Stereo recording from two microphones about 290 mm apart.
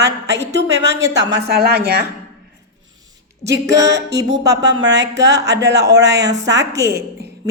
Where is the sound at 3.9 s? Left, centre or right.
Right.